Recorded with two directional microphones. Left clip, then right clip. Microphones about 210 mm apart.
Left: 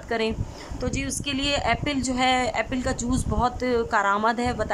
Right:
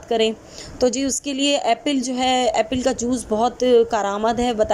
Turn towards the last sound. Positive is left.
turn(degrees=-10)  # may be behind; listen again after turning